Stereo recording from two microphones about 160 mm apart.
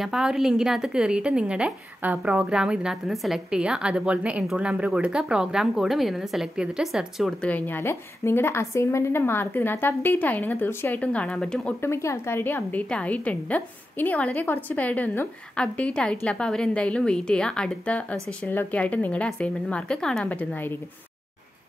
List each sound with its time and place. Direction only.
0.0 s speech: 5° right (ahead or behind)
7.4 s a woman's voice: 10° left (ahead or behind)